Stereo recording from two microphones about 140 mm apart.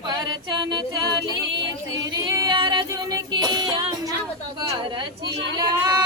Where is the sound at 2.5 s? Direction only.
35° right (ahead or behind).